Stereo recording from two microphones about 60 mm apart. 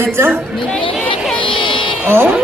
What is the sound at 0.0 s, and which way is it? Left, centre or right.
Speech, right.